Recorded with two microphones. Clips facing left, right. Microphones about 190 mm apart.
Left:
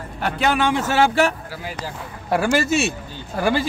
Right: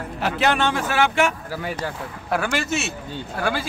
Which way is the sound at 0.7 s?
30° left (ahead or behind).